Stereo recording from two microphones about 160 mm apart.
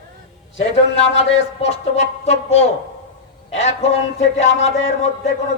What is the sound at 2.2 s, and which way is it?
Speech, 40° left (ahead or behind).